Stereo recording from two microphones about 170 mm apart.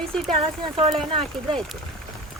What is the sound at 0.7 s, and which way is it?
Speech, 35° right (ahead or behind).